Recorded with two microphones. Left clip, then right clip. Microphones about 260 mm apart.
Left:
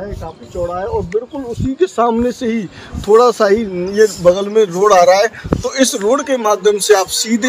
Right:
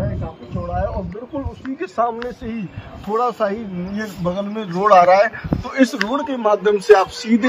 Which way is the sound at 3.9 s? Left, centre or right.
Left.